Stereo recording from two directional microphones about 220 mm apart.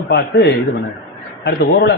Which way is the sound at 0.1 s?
50° left (ahead or behind).